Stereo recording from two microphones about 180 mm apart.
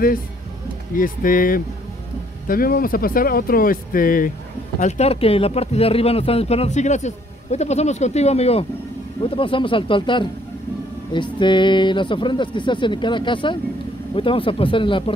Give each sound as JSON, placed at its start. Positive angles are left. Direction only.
{"t": 0.9, "sound": "speech", "side_deg": 50}
{"t": 4.7, "sound": "speech", "side_deg": 40}